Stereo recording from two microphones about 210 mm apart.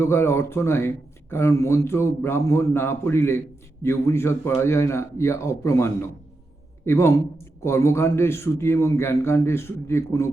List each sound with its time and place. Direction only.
0.0 s speech: 10° left (ahead or behind)